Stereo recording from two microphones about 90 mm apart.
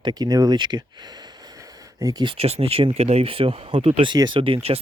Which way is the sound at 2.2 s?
90° right.